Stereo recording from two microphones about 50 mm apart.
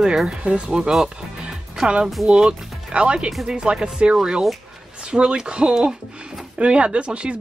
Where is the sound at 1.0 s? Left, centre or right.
Centre.